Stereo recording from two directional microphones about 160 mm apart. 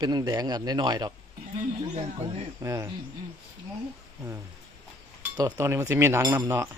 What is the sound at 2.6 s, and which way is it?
Speech, 20° right (ahead or behind).